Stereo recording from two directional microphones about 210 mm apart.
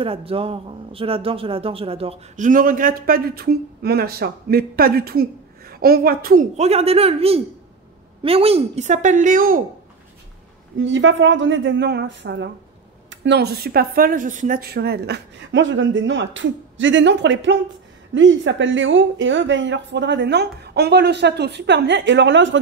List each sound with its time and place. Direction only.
0.0 s speech: 25° right (ahead or behind); by 6.4 s 45° right (ahead or behind)
6.5 s speech: 30° right (ahead or behind)
10.8 s speech: 60° right (ahead or behind)